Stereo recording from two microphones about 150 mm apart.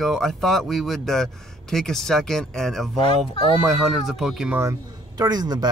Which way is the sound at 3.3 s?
35° left (ahead or behind).